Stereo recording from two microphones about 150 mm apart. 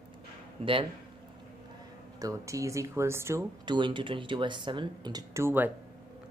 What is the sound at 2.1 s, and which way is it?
Speech, 20° right (ahead or behind).